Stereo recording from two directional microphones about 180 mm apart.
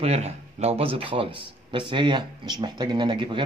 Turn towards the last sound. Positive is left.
turn(degrees=-25)  # may be behind; listen again after turning